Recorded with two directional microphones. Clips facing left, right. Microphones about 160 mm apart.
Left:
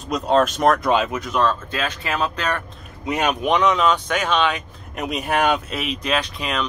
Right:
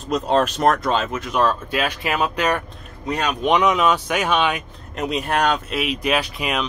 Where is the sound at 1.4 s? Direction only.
15° right (ahead or behind).